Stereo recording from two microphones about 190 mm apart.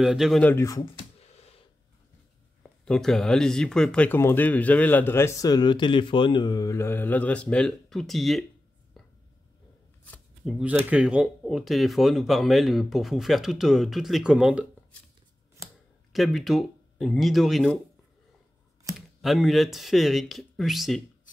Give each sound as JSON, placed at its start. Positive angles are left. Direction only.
{"t": 0.0, "sound": "speech", "side_deg": -5}
{"t": 0.9, "sound": "a sound", "side_deg": 35}
{"t": 2.6, "sound": "speech", "side_deg": 5}
{"t": 9.0, "sound": "a sound", "side_deg": 0}
{"t": 10.1, "sound": "shuffling cards", "side_deg": 0}
{"t": 10.9, "sound": "speech", "side_deg": -5}
{"t": 16.1, "sound": "speech", "side_deg": 0}
{"t": 18.9, "sound": "speech", "side_deg": 0}